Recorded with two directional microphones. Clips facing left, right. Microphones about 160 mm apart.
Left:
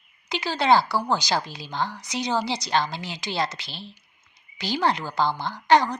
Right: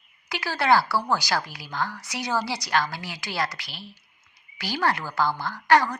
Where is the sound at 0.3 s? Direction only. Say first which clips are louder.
Left 2 dB; 20° left (ahead or behind).